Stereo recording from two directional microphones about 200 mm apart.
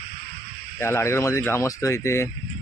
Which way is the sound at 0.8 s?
15° left (ahead or behind).